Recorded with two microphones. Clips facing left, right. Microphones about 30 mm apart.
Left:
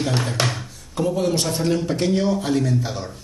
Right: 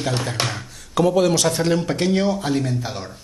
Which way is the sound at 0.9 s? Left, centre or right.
Right.